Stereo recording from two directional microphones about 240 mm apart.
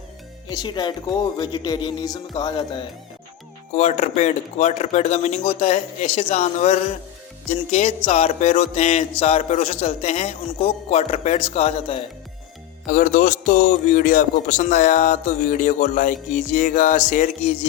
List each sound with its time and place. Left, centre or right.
0.6 s speech: centre
3.8 s speech: left